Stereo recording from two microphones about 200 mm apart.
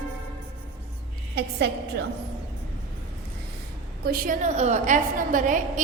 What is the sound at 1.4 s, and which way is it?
Speech, 55° right (ahead or behind).